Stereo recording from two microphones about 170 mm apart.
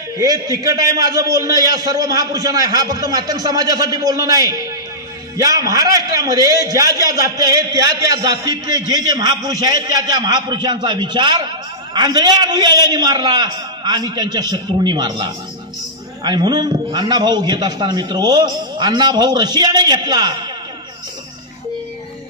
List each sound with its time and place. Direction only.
0.2 s a man's voice: 20° right (ahead or behind)